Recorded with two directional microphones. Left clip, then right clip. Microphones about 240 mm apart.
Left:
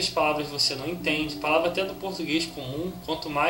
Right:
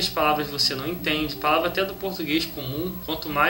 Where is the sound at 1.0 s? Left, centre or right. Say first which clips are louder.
Right 3 dB; left.